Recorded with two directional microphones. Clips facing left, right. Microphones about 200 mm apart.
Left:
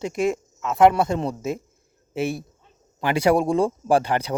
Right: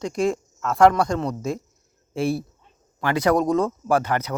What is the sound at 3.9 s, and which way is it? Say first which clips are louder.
Speech: left 1 dB; 30° left (ahead or behind).